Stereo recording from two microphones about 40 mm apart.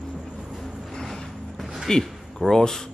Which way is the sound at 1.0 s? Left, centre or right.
Centre.